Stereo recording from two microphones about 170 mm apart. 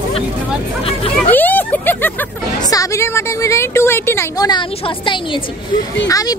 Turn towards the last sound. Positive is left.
turn(degrees=20)  # may be behind; listen again after turning